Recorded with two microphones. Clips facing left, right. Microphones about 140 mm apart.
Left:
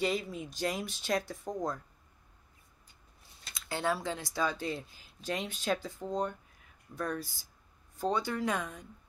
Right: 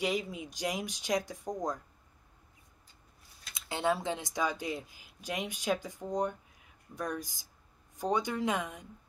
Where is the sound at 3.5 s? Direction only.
20° right (ahead or behind).